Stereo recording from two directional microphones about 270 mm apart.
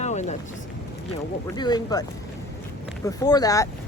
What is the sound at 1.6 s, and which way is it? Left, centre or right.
Speech, centre.